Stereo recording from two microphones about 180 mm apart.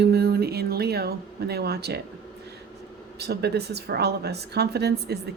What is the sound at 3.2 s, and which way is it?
Speech, 65° right (ahead or behind).